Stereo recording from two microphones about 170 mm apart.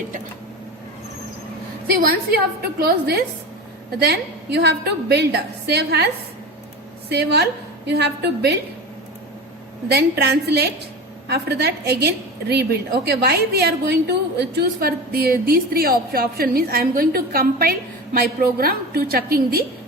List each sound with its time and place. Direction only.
2.0 s a woman's voice: 60° right (ahead or behind)
7.1 s a woman's voice: 80° right
9.9 s a woman's voice: 75° right (ahead or behind)